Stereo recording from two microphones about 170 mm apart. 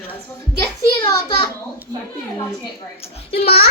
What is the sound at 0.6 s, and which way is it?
Speech, 25° left (ahead or behind).